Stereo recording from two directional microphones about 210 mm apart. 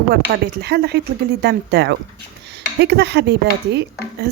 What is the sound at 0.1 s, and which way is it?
Speech, 50° right (ahead or behind).